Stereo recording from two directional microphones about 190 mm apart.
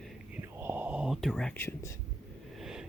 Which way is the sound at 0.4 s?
10° right (ahead or behind).